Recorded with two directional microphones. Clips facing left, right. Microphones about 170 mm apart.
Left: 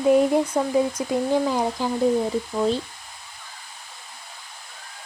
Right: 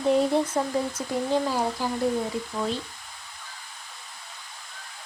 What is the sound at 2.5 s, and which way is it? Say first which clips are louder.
Speech: left 7 dB; 30° left (ahead or behind).